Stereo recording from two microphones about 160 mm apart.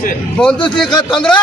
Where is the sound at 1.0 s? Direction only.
30° left (ahead or behind).